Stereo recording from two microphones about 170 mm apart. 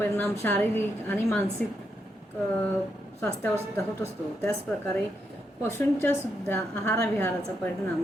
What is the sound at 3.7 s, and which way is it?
Speech, 15° left (ahead or behind).